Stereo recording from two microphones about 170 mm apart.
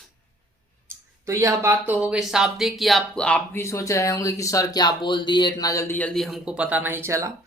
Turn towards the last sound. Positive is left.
turn(degrees=-15)  # may be behind; listen again after turning